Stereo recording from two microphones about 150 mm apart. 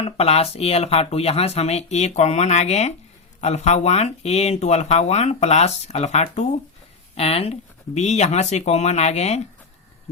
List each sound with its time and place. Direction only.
0.0 s speech: 40° left (ahead or behind)